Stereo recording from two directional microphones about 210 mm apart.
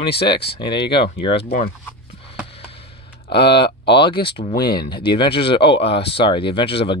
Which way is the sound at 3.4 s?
50° left (ahead or behind).